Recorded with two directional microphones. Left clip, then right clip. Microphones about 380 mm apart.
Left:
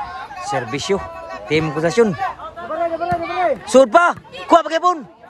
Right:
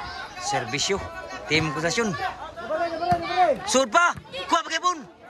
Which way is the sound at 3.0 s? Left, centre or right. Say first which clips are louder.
Left 2 dB; centre.